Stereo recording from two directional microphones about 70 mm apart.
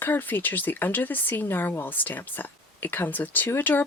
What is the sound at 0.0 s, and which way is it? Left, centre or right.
Speech, left.